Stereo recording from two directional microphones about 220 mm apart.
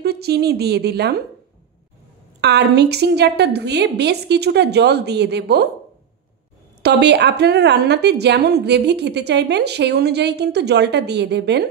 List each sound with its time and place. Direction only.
0.0 s a woman's voice: 45° right (ahead or behind)
2.4 s a woman's voice: 50° right (ahead or behind)
6.8 s a woman's voice: 50° right (ahead or behind)